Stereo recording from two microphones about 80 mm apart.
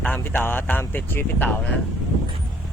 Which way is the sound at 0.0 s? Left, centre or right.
Left.